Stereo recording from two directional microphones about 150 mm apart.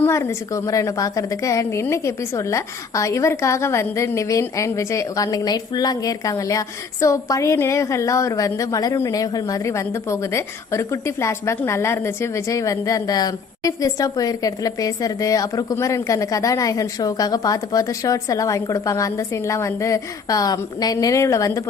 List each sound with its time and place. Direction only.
0.0 s a woman's voice: 20° left (ahead or behind)